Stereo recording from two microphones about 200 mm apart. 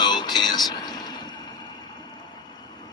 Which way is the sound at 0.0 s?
20° left (ahead or behind).